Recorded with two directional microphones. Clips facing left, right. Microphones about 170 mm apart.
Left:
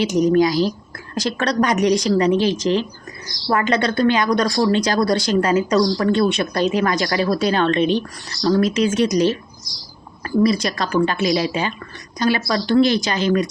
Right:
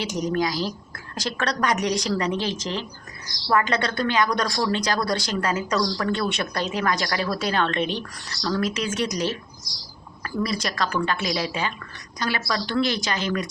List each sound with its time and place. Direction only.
0.3 s a woman's voice: 20° left (ahead or behind)